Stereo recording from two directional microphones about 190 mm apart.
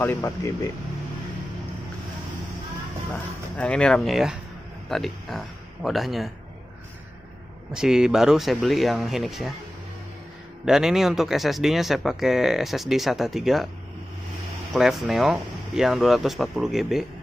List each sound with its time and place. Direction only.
0.0 s speech: 15° left (ahead or behind)
3.1 s speech: 5° left (ahead or behind)
7.7 s speech: 5° right (ahead or behind)
10.6 s speech: 5° right (ahead or behind)
14.7 s speech: centre (ahead or behind)